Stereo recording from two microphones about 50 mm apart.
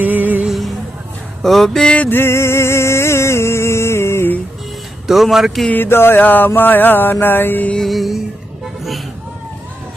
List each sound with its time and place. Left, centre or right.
0.0 s music: right
0.4 s music: centre
1.4 s a man's voice: centre
2.0 s music: left
5.0 s a man's voice: centre
5.7 s music: left
7.8 s a man's voice: centre